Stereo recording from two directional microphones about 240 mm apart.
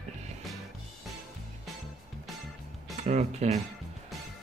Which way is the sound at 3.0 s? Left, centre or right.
Right.